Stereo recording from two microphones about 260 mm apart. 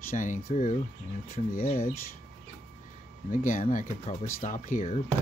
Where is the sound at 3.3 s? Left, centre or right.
Left.